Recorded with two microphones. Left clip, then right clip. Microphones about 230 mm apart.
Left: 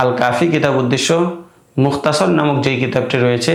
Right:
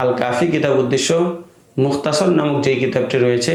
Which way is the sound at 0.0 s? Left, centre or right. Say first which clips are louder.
Left 3 dB; left.